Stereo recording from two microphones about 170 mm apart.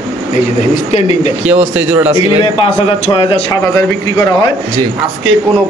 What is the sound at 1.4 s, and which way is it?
Speech, 10° right (ahead or behind).